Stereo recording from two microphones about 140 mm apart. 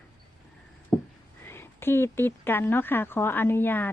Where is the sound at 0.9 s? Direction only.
5° left (ahead or behind).